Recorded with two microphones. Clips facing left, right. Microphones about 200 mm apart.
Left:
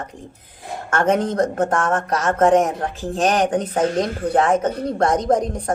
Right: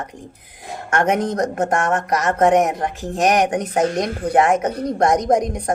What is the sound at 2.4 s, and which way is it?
A woman's voice, 15° right (ahead or behind).